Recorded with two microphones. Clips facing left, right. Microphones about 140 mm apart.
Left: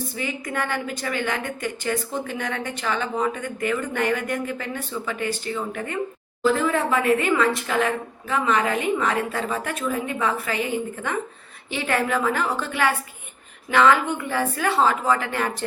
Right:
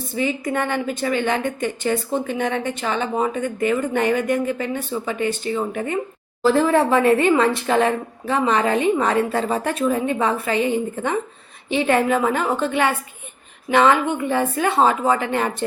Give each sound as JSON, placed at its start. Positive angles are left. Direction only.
{"t": 0.2, "sound": "a woman's voice", "side_deg": -25}
{"t": 6.4, "sound": "a woman's voice", "side_deg": -35}